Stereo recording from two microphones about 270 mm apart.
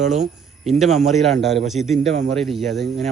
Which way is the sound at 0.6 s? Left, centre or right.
Centre.